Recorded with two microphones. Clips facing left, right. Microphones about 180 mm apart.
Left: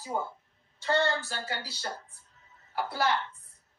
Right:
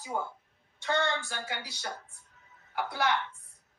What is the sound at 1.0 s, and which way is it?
Speech, 5° left (ahead or behind).